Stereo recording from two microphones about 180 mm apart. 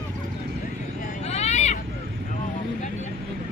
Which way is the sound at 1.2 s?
35° left (ahead or behind).